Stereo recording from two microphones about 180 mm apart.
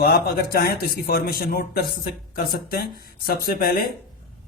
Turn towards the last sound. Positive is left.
turn(degrees=55)  # may be behind; listen again after turning